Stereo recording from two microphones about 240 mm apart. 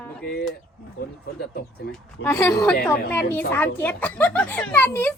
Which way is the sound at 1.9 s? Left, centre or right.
Centre.